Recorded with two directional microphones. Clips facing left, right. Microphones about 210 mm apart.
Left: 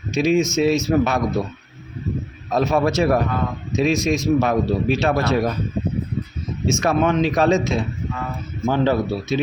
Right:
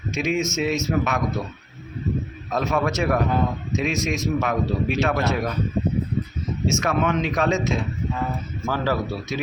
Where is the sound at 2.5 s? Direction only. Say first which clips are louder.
Left 5 dB; 30° left (ahead or behind).